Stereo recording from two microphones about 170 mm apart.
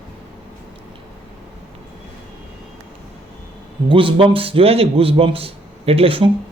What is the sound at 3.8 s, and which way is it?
A man's voice, 30° right (ahead or behind).